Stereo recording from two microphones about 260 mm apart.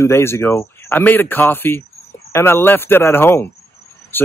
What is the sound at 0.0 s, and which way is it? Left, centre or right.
Speech, centre.